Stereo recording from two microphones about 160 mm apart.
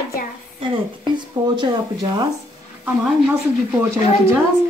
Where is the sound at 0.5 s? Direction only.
30° right (ahead or behind).